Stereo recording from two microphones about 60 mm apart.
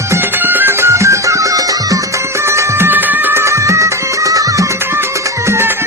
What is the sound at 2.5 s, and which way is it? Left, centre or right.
Music, right.